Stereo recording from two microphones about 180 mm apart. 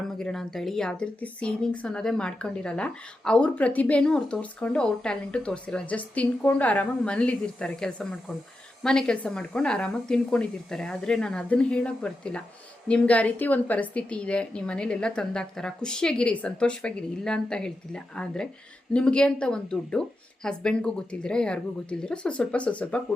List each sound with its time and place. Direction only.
0.2 s a woman's voice: 5° left (ahead or behind)